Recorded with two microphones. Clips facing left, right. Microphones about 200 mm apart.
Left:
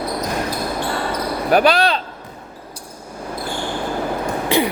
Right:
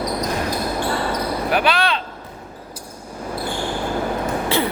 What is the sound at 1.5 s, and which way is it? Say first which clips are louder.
Basketball bounce: left 6 dB; 40° left (ahead or behind).